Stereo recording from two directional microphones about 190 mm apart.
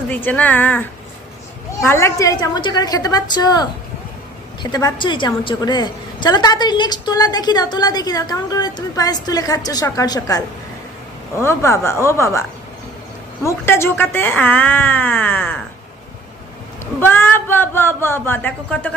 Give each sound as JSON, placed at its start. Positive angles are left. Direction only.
{"t": 0.1, "sound": "speech", "side_deg": 10}
{"t": 1.9, "sound": "a woman's voice", "side_deg": 15}
{"t": 4.6, "sound": "a woman's voice", "side_deg": 20}
{"t": 16.8, "sound": "speech", "side_deg": 10}